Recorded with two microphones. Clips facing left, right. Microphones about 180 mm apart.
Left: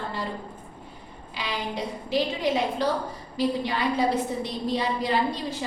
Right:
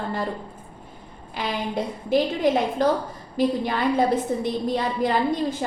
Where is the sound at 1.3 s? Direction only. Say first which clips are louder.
Right 4 dB; 50° right (ahead or behind).